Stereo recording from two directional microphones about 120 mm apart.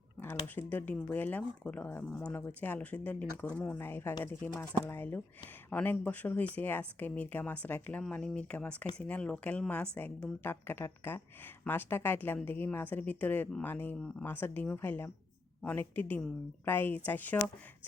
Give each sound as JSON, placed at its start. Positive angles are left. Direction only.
{"t": 0.4, "sound": "speech", "side_deg": 15}